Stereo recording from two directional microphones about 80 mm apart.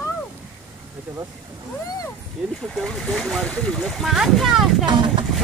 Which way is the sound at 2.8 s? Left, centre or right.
Centre.